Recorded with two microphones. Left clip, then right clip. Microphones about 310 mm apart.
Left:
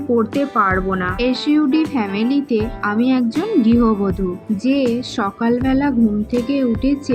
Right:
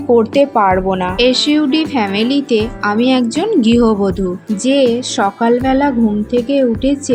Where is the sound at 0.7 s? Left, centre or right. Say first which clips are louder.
Right 5 dB; centre.